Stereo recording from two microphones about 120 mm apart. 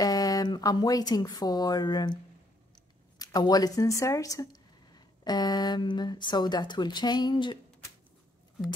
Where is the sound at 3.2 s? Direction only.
35° left (ahead or behind).